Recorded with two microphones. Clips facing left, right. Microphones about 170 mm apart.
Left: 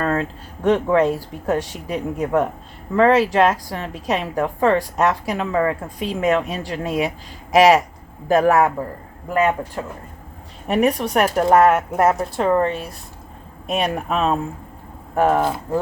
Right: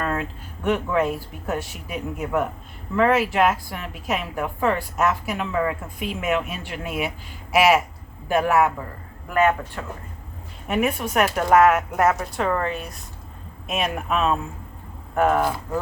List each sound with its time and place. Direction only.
0.0 s a woman's voice: 35° left (ahead or behind)
9.3 s a man's voice: 30° left (ahead or behind)